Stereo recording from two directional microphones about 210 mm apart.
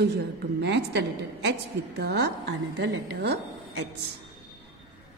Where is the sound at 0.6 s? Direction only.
55° right (ahead or behind).